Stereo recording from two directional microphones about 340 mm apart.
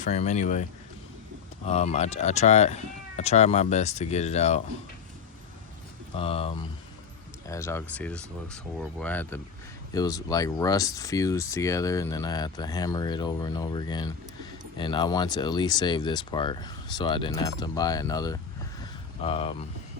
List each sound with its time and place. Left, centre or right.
0.0 s speech: centre
1.6 s speech: centre
6.1 s speech: centre